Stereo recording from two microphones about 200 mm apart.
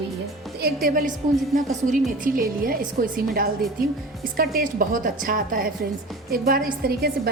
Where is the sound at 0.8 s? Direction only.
45° right (ahead or behind).